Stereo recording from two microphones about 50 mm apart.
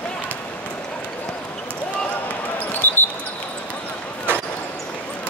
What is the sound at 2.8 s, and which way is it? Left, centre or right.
Basketball bounce, left.